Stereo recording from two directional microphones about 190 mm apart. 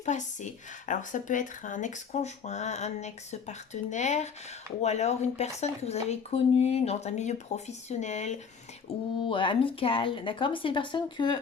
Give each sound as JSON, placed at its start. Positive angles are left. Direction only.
{"t": 0.0, "sound": "speech", "side_deg": 40}